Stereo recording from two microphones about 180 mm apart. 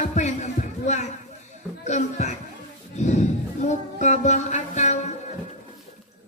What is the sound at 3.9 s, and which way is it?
Music, 40° left (ahead or behind).